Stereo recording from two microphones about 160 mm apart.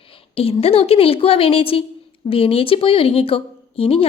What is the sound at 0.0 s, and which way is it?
A woman's voice, 35° left (ahead or behind).